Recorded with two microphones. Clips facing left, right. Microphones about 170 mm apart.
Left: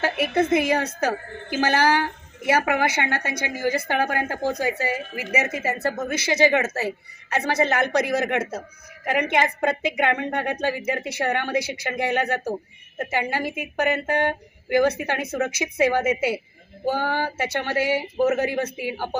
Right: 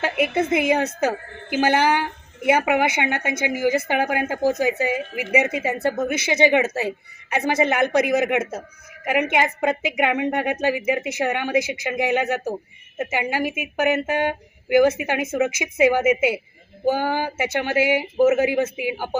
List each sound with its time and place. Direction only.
0.3 s a woman's voice: 10° right (ahead or behind)